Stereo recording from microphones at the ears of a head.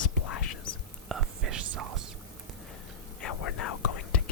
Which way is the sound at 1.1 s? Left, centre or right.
Right.